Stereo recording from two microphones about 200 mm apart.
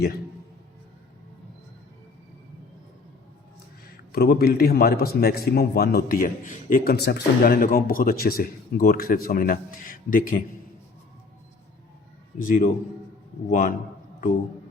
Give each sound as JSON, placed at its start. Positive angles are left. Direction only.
{"t": 4.1, "sound": "a man's voice", "side_deg": 50}
{"t": 12.5, "sound": "a man's voice", "side_deg": 45}